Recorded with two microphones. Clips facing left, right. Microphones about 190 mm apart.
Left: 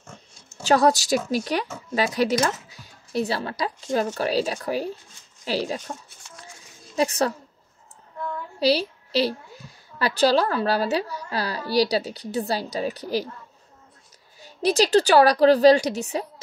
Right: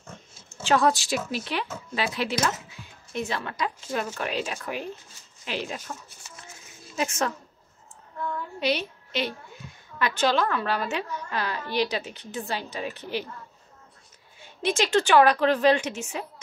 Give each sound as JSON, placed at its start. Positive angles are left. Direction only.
{"t": 0.0, "sound": "oink", "side_deg": -5}
{"t": 0.7, "sound": "a child's voice", "side_deg": 40}
{"t": 7.0, "sound": "a child's voice", "side_deg": 35}
{"t": 8.5, "sound": "a woman's voice", "side_deg": 35}
{"t": 14.4, "sound": "a child's voice", "side_deg": 40}